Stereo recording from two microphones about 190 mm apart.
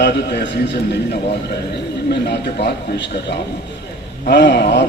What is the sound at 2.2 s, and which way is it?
A man's voice, 65° left (ahead or behind).